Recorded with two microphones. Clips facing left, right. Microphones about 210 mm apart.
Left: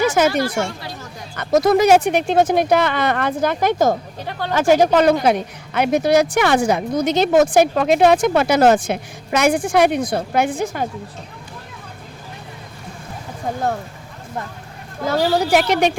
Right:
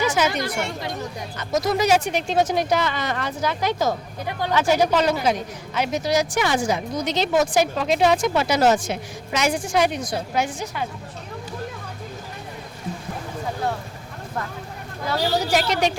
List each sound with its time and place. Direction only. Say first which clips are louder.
0.0 s speech: left 5 dB; 50° left (ahead or behind)
1.4 s a woman's voice: left 7 dB; 55° left (ahead or behind)
15.0 s a woman's voice: left 5 dB; 55° left (ahead or behind)